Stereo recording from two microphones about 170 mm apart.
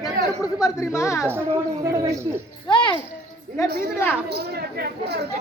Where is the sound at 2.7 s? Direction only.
30° left (ahead or behind).